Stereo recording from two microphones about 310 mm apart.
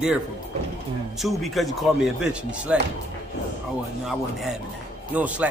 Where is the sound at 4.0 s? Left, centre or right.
Centre.